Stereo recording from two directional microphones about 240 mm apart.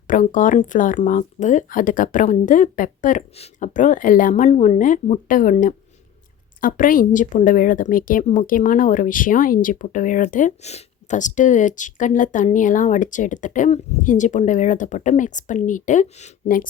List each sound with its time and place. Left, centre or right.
0.1 s speech: left